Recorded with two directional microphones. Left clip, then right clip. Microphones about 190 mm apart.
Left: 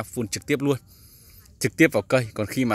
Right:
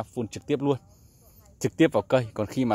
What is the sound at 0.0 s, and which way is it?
Speech, 5° left (ahead or behind).